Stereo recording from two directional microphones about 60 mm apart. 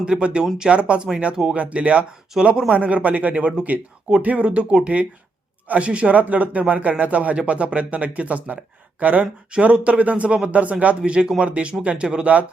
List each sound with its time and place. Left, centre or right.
0.0 s speech: centre